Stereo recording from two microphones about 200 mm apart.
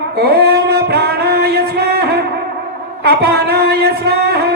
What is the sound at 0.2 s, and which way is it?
Singing, 50° right (ahead or behind).